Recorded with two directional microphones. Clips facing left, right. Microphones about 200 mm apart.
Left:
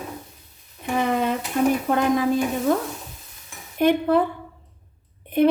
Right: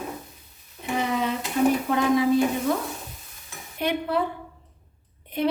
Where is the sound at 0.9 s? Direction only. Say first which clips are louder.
Left 3 dB; 50° left (ahead or behind).